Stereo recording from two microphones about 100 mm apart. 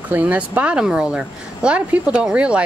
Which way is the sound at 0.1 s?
15° right (ahead or behind).